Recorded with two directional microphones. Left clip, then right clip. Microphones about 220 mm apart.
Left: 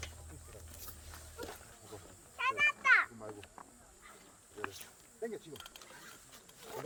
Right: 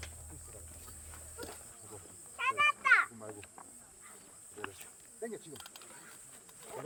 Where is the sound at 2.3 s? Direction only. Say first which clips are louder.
Right 2 dB; 15° left (ahead or behind).